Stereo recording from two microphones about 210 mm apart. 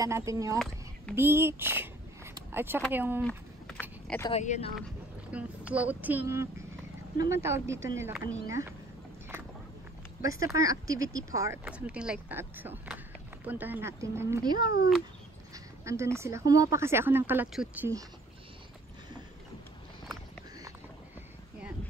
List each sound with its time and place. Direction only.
0.0 s speech: 15° right (ahead or behind)
0.6 s a sound: centre (ahead or behind)
1.1 s a sound: 10° right (ahead or behind)
2.9 s speech: 10° right (ahead or behind)
3.2 s a sound: 5° left (ahead or behind)
4.3 s speech: 30° left (ahead or behind)
5.3 s speech: 5° right (ahead or behind)
10.2 s speech: 15° right (ahead or behind)
14.6 s speech: 45° left (ahead or behind)
15.5 s speech: 15° right (ahead or behind)